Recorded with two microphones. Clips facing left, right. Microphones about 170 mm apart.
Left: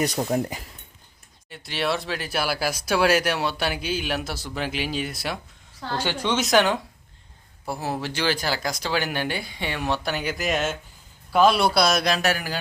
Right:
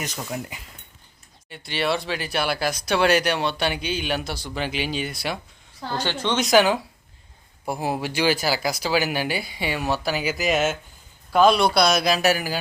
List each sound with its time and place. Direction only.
0.0 s speech: 35° left (ahead or behind)
1.5 s speech: centre (ahead or behind)
7.6 s speech: 15° right (ahead or behind)